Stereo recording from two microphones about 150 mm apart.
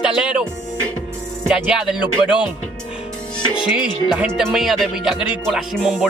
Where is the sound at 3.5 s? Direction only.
35° left (ahead or behind).